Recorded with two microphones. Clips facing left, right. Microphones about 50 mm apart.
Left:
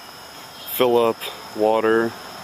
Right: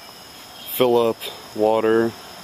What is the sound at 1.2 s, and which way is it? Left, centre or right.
Speech, centre.